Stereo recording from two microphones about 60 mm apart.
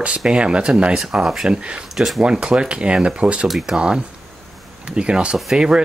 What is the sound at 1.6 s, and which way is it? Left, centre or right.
Speech, centre.